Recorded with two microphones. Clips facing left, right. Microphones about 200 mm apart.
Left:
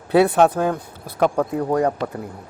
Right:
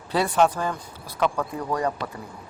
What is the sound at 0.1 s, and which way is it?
Speech, 60° left (ahead or behind).